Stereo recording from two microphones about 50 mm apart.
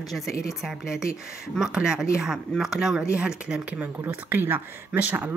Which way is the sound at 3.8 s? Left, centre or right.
Right.